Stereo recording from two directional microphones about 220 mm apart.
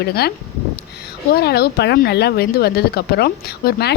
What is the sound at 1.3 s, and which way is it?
Speech, 45° left (ahead or behind).